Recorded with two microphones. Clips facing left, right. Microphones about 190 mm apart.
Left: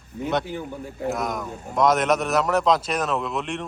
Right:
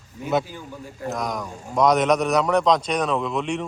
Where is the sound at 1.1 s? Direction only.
5° left (ahead or behind).